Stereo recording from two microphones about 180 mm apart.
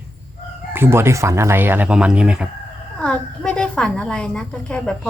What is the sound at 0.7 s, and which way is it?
Speech, 15° right (ahead or behind).